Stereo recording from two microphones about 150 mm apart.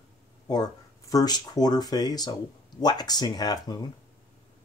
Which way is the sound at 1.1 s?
25° left (ahead or behind).